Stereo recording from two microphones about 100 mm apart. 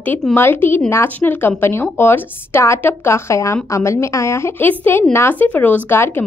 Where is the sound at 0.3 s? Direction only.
20° left (ahead or behind).